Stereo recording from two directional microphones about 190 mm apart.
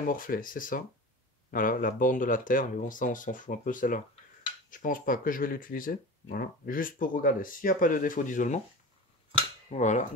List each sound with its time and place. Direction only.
0.0 s speech: 45° left (ahead or behind)
9.7 s cap gun: 40° left (ahead or behind)